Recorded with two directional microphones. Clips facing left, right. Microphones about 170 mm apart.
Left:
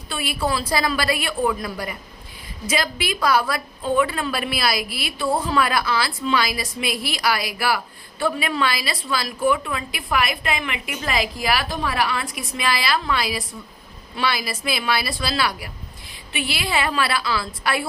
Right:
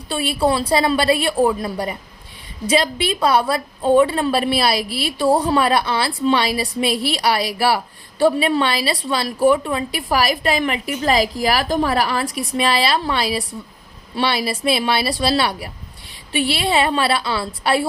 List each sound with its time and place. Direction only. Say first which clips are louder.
0.1 s a woman's voice: right 6 dB; 30° right (ahead or behind)